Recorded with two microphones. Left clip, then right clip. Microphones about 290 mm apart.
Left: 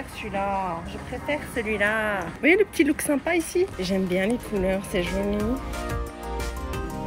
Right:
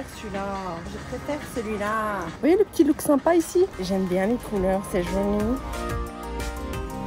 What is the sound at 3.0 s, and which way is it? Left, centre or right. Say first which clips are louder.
Speech: right 4 dB; right.